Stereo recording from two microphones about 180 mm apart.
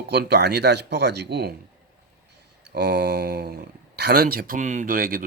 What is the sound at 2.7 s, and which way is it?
Speech, 65° right (ahead or behind).